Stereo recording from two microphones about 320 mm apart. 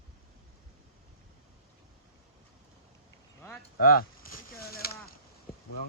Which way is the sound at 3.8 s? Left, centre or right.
Left.